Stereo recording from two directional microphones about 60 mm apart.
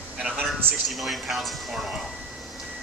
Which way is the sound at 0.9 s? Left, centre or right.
Centre.